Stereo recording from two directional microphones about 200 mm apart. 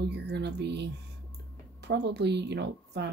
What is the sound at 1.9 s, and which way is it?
Speech, 60° right (ahead or behind).